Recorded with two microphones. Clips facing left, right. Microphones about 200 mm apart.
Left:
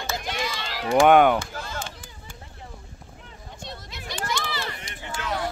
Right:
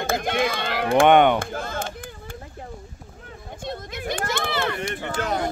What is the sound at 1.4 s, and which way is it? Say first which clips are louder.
Chop: right 5 dB; 55° right (ahead or behind).